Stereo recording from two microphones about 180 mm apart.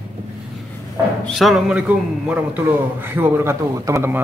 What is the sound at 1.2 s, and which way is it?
A man's voice, centre (ahead or behind).